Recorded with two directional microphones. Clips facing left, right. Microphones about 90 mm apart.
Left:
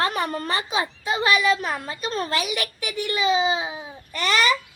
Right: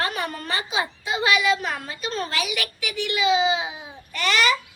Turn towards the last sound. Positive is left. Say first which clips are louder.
# even
turn(degrees=35)  # may be behind; listen again after turning